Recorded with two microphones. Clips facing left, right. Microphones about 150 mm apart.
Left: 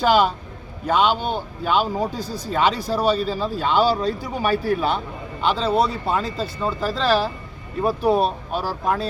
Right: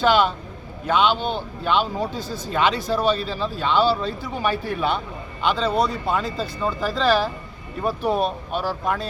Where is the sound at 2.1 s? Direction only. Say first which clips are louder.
Left 1 dB; 40° left (ahead or behind).